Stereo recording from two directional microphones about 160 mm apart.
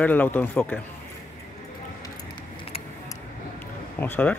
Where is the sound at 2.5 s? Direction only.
35° left (ahead or behind).